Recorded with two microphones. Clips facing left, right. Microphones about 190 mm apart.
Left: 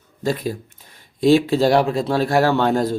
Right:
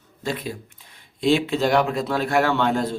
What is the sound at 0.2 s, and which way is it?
A man's voice, 40° left (ahead or behind).